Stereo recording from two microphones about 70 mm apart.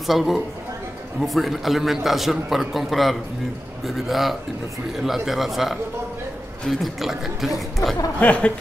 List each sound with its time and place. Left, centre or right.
0.0 s a man's voice: centre
8.2 s speech: centre